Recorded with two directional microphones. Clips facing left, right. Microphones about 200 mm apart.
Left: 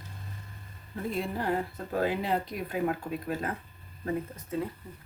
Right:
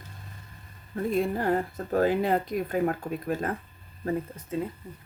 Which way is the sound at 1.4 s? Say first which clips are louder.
Right 4 dB; 45° right (ahead or behind).